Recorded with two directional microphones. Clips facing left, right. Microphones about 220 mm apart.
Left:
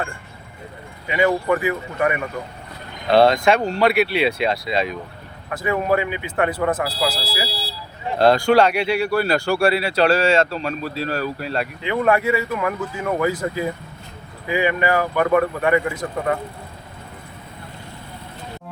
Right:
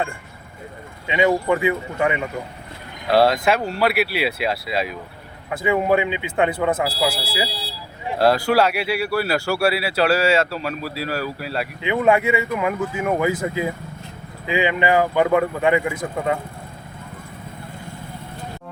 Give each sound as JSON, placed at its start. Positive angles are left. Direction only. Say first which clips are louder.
{"t": 1.0, "sound": "speech", "louder": "right 1 dB", "side_deg": -20}
{"t": 3.1, "sound": "speech", "louder": "left 2 dB", "side_deg": -5}
{"t": 5.5, "sound": "speech", "louder": "right 2 dB", "side_deg": -20}
{"t": 6.7, "sound": "speech", "louder": "right 1 dB", "side_deg": -10}
{"t": 11.8, "sound": "speech", "louder": "right 2 dB", "side_deg": -20}